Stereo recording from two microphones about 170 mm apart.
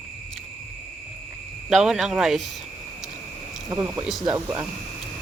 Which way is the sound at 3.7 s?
10° right (ahead or behind).